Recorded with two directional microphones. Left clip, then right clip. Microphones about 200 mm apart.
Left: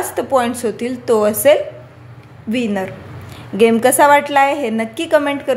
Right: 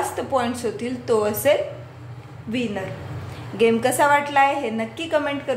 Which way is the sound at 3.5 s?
50° left (ahead or behind).